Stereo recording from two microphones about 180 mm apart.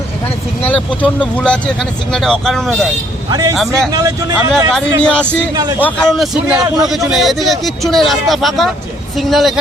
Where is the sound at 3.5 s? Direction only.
Centre (ahead or behind).